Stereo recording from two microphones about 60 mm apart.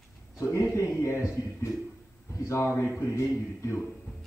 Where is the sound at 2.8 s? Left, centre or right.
Left.